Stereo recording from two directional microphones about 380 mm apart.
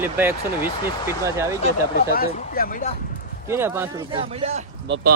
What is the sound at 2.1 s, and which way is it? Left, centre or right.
Speech, left.